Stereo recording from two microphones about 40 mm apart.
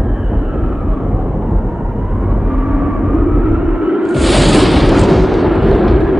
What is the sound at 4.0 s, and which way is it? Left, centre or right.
Music, centre.